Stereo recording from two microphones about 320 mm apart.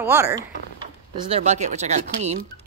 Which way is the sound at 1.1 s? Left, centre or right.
Centre.